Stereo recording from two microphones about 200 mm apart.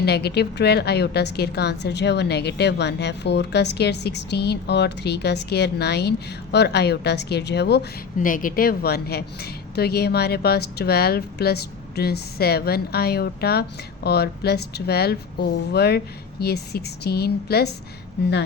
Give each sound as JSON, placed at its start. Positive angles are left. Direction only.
{"t": 0.0, "sound": "a woman's voice", "side_deg": 55}
{"t": 8.2, "sound": "a woman's voice", "side_deg": 45}